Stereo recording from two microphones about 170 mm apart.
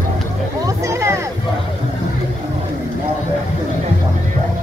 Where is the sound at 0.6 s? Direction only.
15° right (ahead or behind).